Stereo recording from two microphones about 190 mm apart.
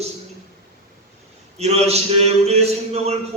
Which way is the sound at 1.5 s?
35° right (ahead or behind).